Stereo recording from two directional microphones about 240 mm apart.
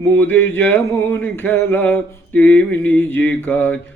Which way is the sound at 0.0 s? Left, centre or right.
Centre.